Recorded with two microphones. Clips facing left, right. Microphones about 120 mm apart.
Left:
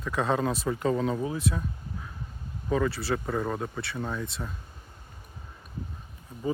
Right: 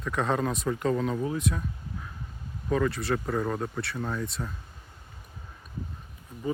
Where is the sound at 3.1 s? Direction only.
5° left (ahead or behind).